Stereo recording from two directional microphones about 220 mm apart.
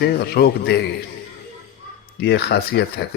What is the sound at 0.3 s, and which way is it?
Speech, 50° left (ahead or behind).